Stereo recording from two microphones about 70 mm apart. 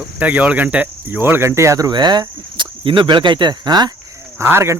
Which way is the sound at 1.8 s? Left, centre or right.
Right.